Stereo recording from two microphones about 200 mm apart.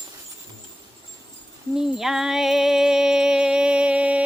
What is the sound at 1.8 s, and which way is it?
Music, centre (ahead or behind).